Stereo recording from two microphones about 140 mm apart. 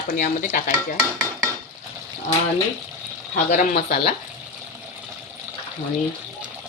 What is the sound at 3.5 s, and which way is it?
Speech, 75° left (ahead or behind).